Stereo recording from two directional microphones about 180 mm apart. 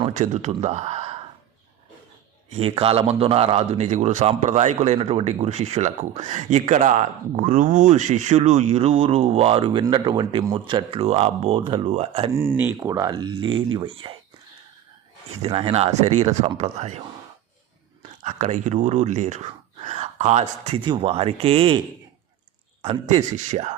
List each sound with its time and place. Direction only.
0.1 s speech: 40° right (ahead or behind)
2.5 s a man's voice: 35° right (ahead or behind)
12.3 s speech: 15° right (ahead or behind); by 13.9 s 30° right (ahead or behind)
15.4 s a man's voice: 30° right (ahead or behind)
18.2 s a man's voice: 40° right (ahead or behind)
22.8 s a man's voice: 35° right (ahead or behind)